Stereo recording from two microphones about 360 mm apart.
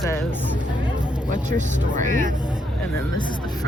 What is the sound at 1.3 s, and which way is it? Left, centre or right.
Speech, right.